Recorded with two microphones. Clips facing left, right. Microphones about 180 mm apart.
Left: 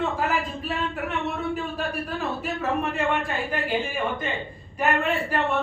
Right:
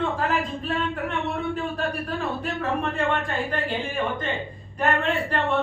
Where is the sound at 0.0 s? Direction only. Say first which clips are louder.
Even; 5° left (ahead or behind).